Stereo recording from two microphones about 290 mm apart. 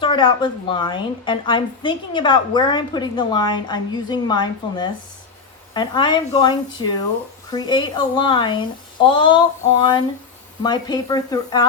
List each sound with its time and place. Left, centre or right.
0.0 s a woman's voice: centre
10.6 s a woman's voice: centre